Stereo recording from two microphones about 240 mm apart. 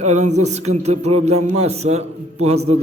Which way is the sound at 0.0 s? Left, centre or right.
Right.